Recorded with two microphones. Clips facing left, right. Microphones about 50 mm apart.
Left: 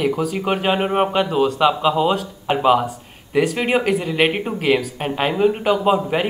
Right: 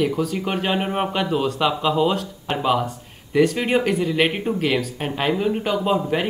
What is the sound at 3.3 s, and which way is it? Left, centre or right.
Speech, centre.